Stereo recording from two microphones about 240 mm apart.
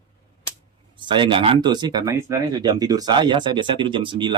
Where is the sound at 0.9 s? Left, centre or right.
Centre.